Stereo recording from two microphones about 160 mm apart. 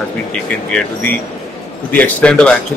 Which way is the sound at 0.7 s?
10° left (ahead or behind).